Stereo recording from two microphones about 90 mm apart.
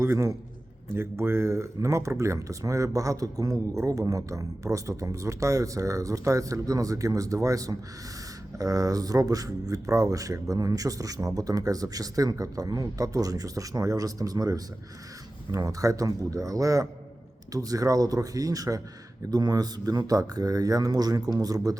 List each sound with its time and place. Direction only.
0.0 s speech: 30° right (ahead or behind)